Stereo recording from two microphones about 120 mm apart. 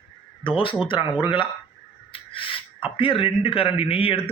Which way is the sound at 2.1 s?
45° left (ahead or behind).